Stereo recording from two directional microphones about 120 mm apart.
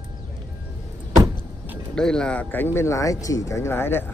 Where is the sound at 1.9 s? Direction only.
5° left (ahead or behind).